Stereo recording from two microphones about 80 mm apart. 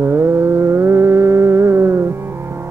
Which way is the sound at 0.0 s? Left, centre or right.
Right.